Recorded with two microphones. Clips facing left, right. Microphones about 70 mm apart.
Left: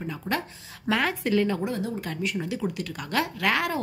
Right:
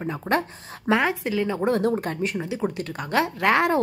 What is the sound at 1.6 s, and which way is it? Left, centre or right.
Speech, right.